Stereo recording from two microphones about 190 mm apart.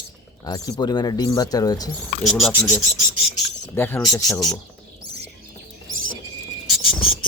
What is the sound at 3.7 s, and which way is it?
Speech, 10° left (ahead or behind).